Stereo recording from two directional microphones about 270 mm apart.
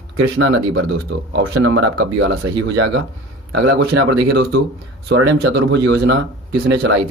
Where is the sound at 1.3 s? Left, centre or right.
Right.